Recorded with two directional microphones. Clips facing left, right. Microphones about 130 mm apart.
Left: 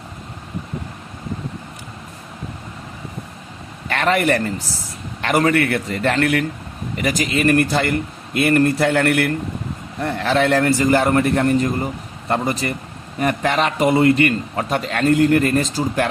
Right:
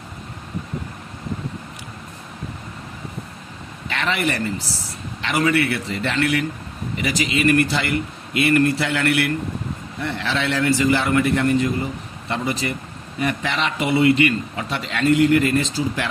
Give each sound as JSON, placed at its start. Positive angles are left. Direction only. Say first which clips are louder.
{"t": 3.8, "sound": "a man's voice", "louder": "left 6 dB", "side_deg": 50}